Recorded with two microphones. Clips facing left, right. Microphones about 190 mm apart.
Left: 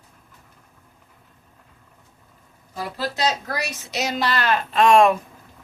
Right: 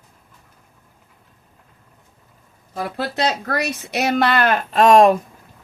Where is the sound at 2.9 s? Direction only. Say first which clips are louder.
Right 2 dB; 60° right (ahead or behind); by 5.1 s 40° right (ahead or behind).